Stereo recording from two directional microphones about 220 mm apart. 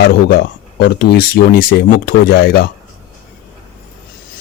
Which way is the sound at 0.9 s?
45° left (ahead or behind).